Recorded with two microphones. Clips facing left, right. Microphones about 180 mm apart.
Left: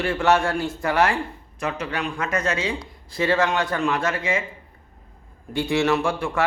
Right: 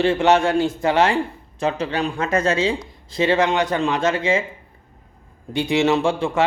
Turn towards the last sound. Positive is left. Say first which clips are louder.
# right 4 dB
turn(degrees=-25)  # may be behind; listen again after turning